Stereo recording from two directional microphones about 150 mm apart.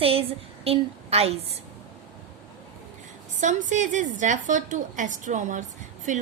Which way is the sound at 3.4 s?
55° right (ahead or behind).